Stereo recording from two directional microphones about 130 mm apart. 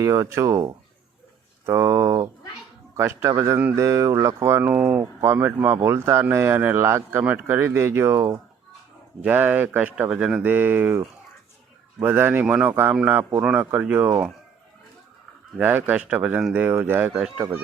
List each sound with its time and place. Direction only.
0.0 s speech: 20° right (ahead or behind)
15.5 s speech: 15° right (ahead or behind)